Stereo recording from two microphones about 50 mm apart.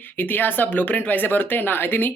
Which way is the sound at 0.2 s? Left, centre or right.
Left.